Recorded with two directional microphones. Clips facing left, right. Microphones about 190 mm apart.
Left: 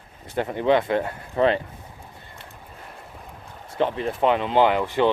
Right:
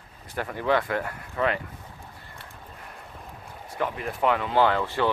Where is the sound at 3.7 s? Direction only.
25° left (ahead or behind).